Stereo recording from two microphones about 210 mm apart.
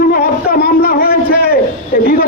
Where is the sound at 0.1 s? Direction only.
45° left (ahead or behind).